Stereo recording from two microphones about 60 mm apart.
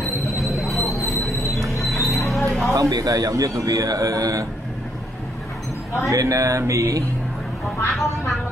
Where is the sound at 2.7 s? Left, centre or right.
Right.